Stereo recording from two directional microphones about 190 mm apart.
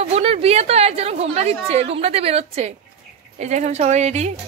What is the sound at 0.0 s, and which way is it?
A woman's voice, 30° right (ahead or behind).